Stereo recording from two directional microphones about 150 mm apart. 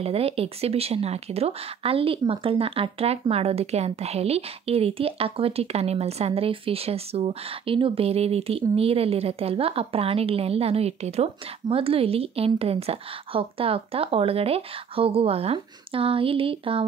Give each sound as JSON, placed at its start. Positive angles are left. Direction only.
{"t": 0.0, "sound": "speech", "side_deg": -40}